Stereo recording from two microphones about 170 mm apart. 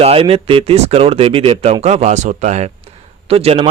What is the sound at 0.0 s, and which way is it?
Speech, 35° right (ahead or behind).